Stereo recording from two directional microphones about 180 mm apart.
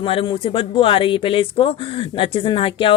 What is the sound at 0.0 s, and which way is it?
Speech, 30° left (ahead or behind).